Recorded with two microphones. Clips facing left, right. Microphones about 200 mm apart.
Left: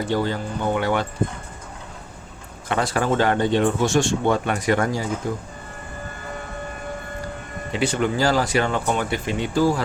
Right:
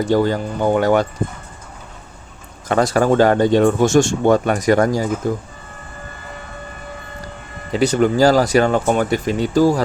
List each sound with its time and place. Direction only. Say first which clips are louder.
0.0 s speech: right 7 dB; 45° right (ahead or behind)
2.6 s speech: right 7 dB; 40° right (ahead or behind)
7.7 s speech: right 7 dB; 40° right (ahead or behind)